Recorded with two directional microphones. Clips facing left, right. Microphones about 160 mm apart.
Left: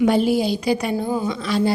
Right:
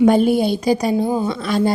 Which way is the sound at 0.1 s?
50° right (ahead or behind).